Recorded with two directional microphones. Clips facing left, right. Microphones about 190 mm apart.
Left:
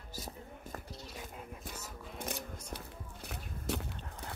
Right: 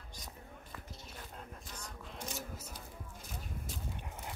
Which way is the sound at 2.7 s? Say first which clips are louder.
Left 4 dB; 70° left (ahead or behind).